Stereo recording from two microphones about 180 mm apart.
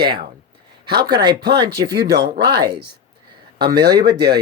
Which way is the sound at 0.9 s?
60° right (ahead or behind).